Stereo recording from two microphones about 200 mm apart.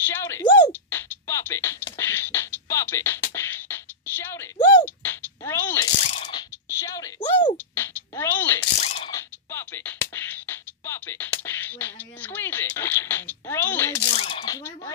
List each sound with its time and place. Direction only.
0.0 s speech: 10° left (ahead or behind)
0.8 s music: 10° left (ahead or behind)
4.6 s music: 20° left (ahead or behind)
4.8 s a sound: 10° left (ahead or behind)
6.0 s ratchet: 30° left (ahead or behind)
6.7 s a sound: 15° left (ahead or behind)
8.8 s mechanisms: 30° left (ahead or behind)
9.1 s music: 10° left (ahead or behind)
14.1 s coin: 25° left (ahead or behind)